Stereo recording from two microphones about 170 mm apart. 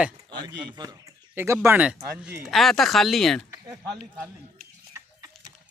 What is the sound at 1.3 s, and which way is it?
Speech, 15° right (ahead or behind).